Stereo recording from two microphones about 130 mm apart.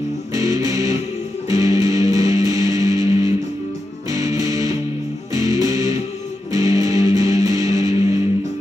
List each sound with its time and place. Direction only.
0.3 s music: 25° right (ahead or behind)